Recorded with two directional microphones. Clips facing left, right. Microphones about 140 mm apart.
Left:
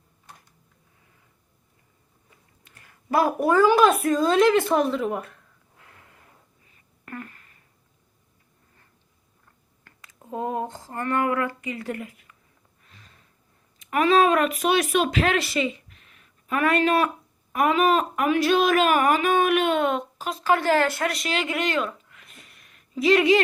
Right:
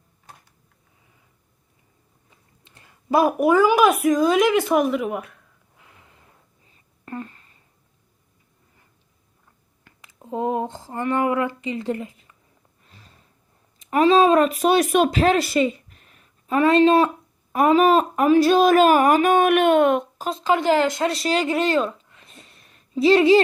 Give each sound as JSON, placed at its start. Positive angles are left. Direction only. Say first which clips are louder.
{"t": 2.6, "sound": "a woman's voice", "louder": "right 4 dB", "side_deg": -20}
{"t": 5.8, "sound": "snort", "louder": "even", "side_deg": -20}
{"t": 6.7, "sound": "a sound", "louder": "right 4 dB", "side_deg": -25}
{"t": 9.8, "sound": "a sound", "louder": "right 3 dB", "side_deg": -20}
{"t": 13.9, "sound": "speech", "louder": "right 4 dB", "side_deg": -25}
{"t": 20.4, "sound": "speech", "louder": "right 2 dB", "side_deg": -15}